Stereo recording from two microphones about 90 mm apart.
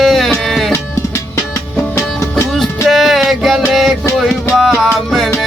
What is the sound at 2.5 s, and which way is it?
Music, centre (ahead or behind).